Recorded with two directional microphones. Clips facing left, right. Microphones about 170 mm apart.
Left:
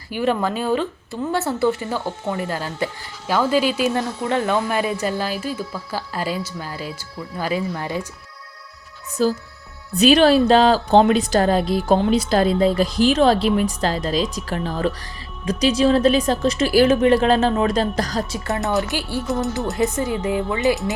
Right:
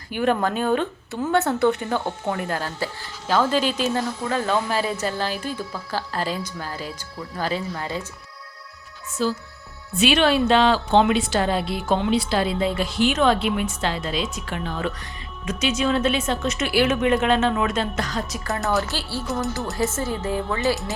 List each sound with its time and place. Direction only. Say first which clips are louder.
0.4 s speech: left 1 dB; 5° left (ahead or behind)
2.6 s speech: left 3 dB; 15° left (ahead or behind)
3.9 s speech: left 3 dB; 20° left (ahead or behind)
9.2 s a woman's voice: left 5 dB; 40° left (ahead or behind)
18.8 s speech: left 4 dB; 15° left (ahead or behind)